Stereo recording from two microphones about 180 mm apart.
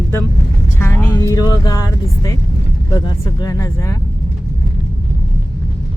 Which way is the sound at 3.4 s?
20° left (ahead or behind).